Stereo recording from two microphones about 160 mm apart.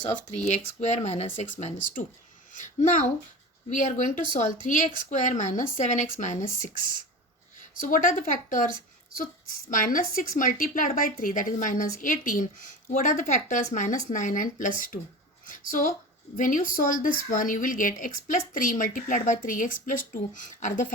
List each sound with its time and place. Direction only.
0.4 s a woman's voice: 45° left (ahead or behind)
7.8 s a woman's voice: 55° left (ahead or behind)